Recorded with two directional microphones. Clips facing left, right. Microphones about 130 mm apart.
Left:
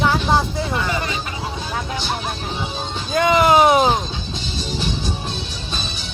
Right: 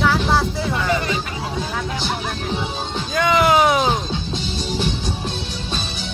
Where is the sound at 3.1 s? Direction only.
40° left (ahead or behind).